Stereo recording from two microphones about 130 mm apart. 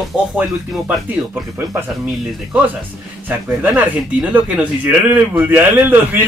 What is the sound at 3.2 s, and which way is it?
Speech, 10° right (ahead or behind).